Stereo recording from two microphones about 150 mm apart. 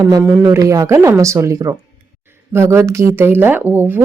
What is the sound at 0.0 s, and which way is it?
A woman's voice, 25° right (ahead or behind).